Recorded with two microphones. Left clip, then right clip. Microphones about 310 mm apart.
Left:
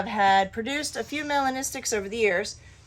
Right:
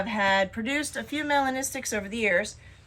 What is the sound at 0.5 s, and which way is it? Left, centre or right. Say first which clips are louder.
A woman's voice: even; left.